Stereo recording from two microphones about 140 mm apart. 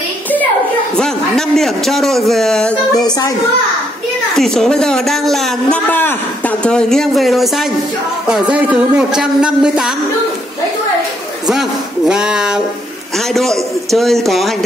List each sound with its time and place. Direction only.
0.9 s a man's voice: 5° left (ahead or behind)
3.0 s a child's voice: 25° left (ahead or behind)
4.4 s a man's voice: 5° left (ahead or behind)
5.9 s a man's voice: 15° left (ahead or behind); by 9.9 s 5° right (ahead or behind)
12.1 s a man's voice: 5° right (ahead or behind)